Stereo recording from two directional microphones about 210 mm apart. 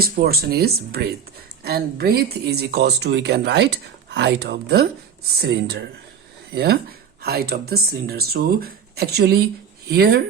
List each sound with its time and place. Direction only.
0.0 s speech: 45° right (ahead or behind)